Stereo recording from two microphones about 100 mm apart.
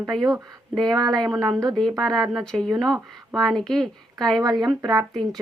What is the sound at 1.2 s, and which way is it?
Speech, centre (ahead or behind).